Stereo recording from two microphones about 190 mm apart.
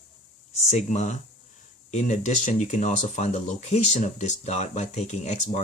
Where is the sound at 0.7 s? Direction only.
35° left (ahead or behind).